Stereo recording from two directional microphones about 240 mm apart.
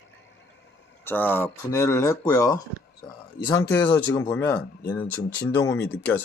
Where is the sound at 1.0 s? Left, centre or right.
Centre.